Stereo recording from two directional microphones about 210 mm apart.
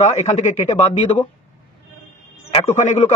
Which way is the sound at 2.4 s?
30° left (ahead or behind).